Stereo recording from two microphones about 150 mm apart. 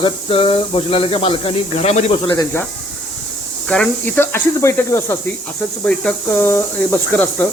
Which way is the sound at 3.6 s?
5° left (ahead or behind).